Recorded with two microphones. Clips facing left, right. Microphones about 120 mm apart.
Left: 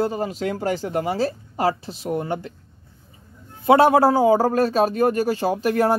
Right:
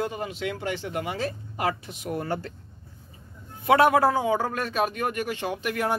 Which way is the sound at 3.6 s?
30° left (ahead or behind).